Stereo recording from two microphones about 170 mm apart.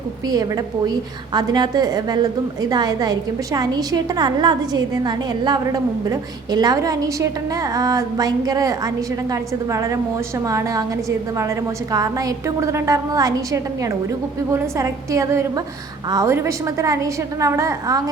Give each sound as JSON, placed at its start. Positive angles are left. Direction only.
{"t": 0.3, "sound": "a woman's voice", "side_deg": -20}